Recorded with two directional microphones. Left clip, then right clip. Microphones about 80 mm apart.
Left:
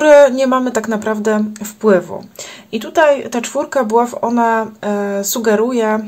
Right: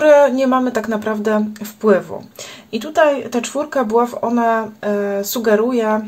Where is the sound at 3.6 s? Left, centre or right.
Left.